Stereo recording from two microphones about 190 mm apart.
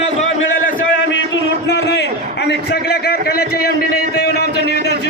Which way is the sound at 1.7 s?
65° left (ahead or behind).